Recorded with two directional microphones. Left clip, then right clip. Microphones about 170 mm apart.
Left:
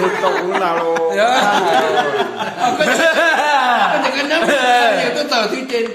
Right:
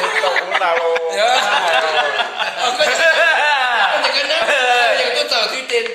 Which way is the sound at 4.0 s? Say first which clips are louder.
Even; 15° right (ahead or behind).